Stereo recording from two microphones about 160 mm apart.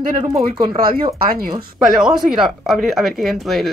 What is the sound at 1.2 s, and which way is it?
Speech, 65° right (ahead or behind).